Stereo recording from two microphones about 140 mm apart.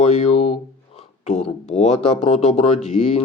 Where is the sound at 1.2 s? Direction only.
50° left (ahead or behind).